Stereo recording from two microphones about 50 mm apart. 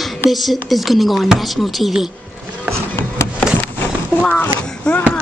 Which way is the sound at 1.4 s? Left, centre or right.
Centre.